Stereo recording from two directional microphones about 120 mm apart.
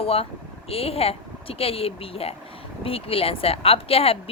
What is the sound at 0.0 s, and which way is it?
A woman's voice, 50° left (ahead or behind).